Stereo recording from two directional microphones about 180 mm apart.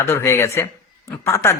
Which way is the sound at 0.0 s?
15° left (ahead or behind).